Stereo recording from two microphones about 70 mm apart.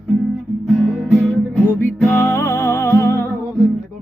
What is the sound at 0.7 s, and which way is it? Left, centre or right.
Music, centre.